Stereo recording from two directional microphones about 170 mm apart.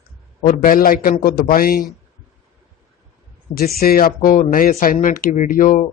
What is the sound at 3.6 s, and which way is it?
Speech, 65° left (ahead or behind).